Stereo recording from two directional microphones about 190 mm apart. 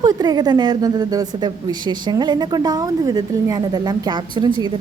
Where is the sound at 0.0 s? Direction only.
20° right (ahead or behind).